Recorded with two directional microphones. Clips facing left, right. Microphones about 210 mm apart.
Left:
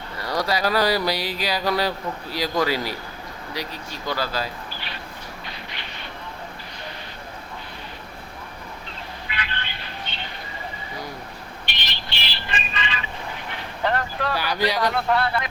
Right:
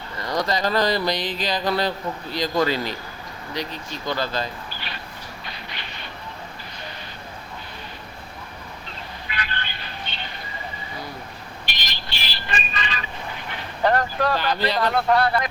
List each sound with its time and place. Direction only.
0.2 s speech: 5° left (ahead or behind)
9.3 s vehicle: 45° right (ahead or behind)
11.6 s a sound: 40° right (ahead or behind)
13.8 s boat: 40° right (ahead or behind)
14.3 s speech: 10° left (ahead or behind)
15.1 s speech: 40° right (ahead or behind)